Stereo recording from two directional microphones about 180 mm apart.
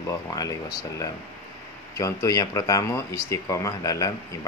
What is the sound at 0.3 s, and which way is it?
Speech, 20° left (ahead or behind).